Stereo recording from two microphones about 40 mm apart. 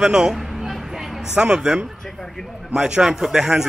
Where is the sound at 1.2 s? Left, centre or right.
Right.